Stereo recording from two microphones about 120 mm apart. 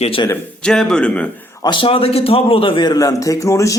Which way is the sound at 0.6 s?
5° left (ahead or behind).